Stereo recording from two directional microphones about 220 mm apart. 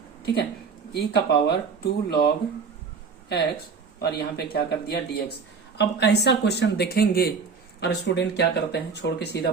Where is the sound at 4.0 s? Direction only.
45° left (ahead or behind).